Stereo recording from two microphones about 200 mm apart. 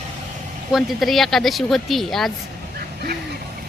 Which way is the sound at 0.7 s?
Centre (ahead or behind).